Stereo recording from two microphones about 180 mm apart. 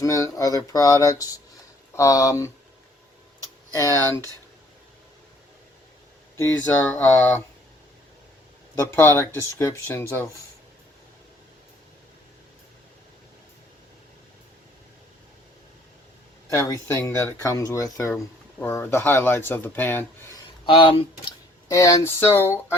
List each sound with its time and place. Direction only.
0.0 s speech: 20° left (ahead or behind)
6.3 s speech: 15° left (ahead or behind)
8.8 s speech: 15° left (ahead or behind)
16.6 s speech: 15° left (ahead or behind)
20.7 s speech: 30° left (ahead or behind)
21.7 s speech: 15° left (ahead or behind)